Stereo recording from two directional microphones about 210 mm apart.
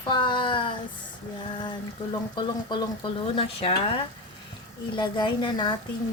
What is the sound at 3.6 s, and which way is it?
Speech, 25° left (ahead or behind).